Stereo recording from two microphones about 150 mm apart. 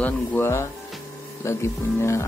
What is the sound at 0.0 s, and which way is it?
Speech, 15° left (ahead or behind).